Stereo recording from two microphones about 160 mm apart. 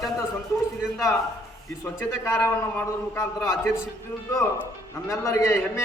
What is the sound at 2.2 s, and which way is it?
Speech, 15° left (ahead or behind).